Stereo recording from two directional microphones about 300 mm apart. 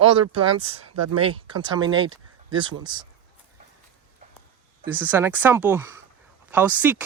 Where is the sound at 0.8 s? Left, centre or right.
Right.